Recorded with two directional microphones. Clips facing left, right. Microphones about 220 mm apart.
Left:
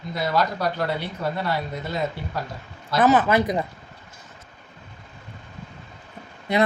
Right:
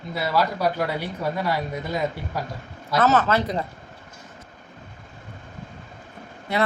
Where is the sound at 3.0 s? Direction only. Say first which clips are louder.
Left 2 dB; 15° left (ahead or behind).